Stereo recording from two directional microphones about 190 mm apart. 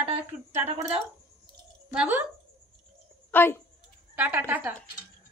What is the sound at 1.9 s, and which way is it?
Speech, 5° right (ahead or behind).